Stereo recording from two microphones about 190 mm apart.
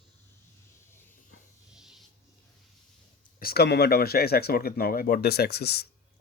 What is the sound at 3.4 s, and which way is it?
Speech, 55° left (ahead or behind).